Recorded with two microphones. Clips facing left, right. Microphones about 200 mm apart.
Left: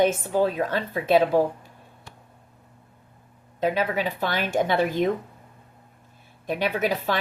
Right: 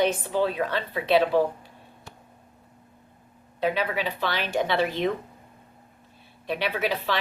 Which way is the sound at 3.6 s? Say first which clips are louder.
Left 2 dB; 45° left (ahead or behind).